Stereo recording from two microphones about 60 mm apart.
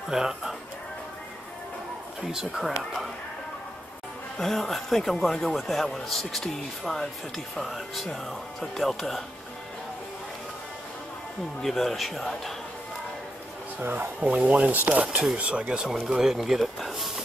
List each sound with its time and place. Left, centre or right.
0.1 s speech: centre
2.3 s speech: centre
4.4 s speech: centre
11.6 s speech: centre
13.7 s speech: right; by 17.1 s centre